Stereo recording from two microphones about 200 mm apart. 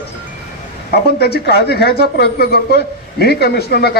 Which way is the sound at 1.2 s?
50° left (ahead or behind).